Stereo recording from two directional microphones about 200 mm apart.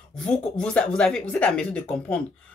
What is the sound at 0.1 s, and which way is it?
A woman's voice, 5° left (ahead or behind).